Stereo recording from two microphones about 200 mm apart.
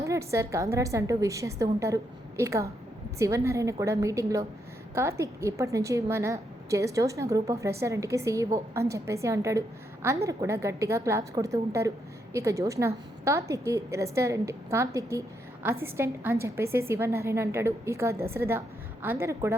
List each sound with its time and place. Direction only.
0.0 s a woman's voice: 15° right (ahead or behind)